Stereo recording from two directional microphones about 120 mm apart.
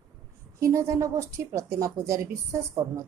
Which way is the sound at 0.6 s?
25° right (ahead or behind).